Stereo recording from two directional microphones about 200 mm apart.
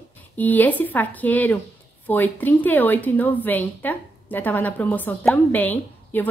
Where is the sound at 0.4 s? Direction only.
10° left (ahead or behind).